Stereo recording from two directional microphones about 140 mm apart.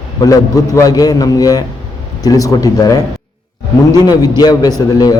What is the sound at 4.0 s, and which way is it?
Speech, 30° left (ahead or behind).